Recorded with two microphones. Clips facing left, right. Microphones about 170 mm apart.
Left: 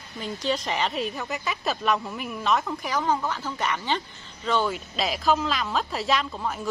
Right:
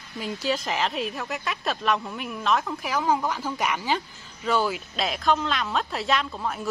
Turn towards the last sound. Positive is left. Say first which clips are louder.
# even
turn(degrees=0)  # may be behind; listen again after turning